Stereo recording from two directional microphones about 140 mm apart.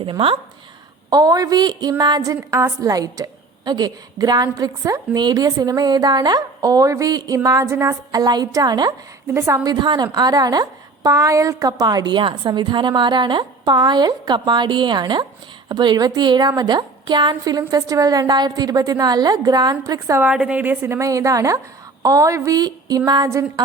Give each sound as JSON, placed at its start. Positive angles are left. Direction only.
{"t": 0.0, "sound": "a woman's voice", "side_deg": -40}
{"t": 1.1, "sound": "a woman's voice", "side_deg": -25}
{"t": 9.2, "sound": "a woman's voice", "side_deg": -20}
{"t": 9.6, "sound": "a woman's voice", "side_deg": -30}
{"t": 20.2, "sound": "a woman's voice", "side_deg": -10}